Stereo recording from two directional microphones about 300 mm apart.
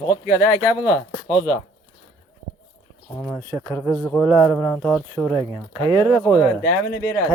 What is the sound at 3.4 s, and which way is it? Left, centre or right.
Speech, centre.